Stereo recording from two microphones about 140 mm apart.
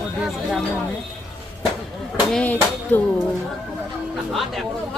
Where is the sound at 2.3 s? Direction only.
10° left (ahead or behind).